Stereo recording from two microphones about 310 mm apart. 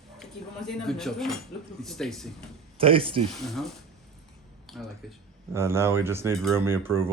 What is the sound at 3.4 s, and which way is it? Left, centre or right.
Speech, centre.